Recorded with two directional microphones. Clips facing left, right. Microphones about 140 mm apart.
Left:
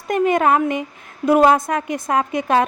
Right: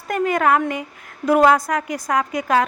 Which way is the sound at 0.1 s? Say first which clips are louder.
Left 2 dB; 25° left (ahead or behind).